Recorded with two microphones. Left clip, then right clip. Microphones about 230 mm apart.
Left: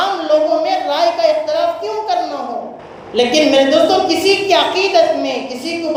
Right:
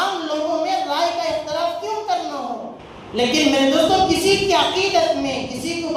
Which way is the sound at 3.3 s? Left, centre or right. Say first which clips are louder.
Left 5 dB; right.